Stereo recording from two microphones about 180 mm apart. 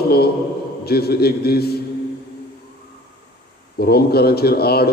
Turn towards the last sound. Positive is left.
turn(degrees=60)  # may be behind; listen again after turning